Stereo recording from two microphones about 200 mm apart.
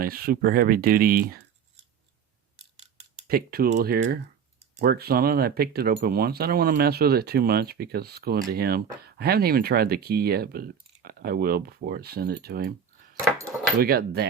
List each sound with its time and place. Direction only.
0.0 s speech: 50° right (ahead or behind)
2.7 s scissors: 30° right (ahead or behind)
3.2 s speech: 50° right (ahead or behind)
13.7 s speech: 50° right (ahead or behind)